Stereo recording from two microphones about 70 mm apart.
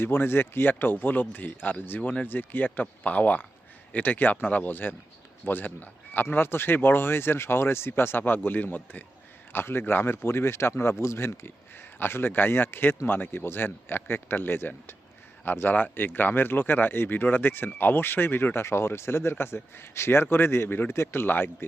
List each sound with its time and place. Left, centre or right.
0.0 s speech: left